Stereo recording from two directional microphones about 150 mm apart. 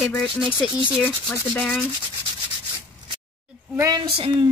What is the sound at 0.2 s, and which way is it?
Speech, 5° right (ahead or behind).